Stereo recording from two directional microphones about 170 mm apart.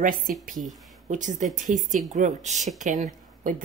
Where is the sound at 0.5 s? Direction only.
Centre (ahead or behind).